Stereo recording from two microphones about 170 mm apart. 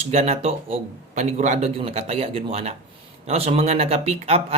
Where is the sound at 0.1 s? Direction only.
40° right (ahead or behind).